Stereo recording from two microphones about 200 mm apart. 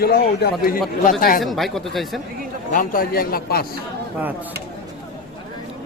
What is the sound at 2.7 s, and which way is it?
Speech, 45° left (ahead or behind).